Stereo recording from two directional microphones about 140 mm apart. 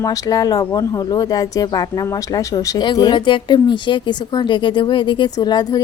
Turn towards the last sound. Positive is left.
turn(degrees=30)  # may be behind; listen again after turning